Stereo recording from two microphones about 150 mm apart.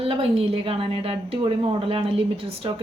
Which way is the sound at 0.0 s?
40° right (ahead or behind).